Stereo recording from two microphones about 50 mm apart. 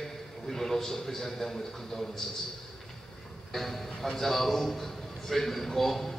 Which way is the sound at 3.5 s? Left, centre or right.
Centre.